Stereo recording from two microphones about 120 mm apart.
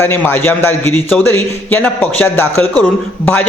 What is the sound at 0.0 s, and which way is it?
Speech, 20° left (ahead or behind).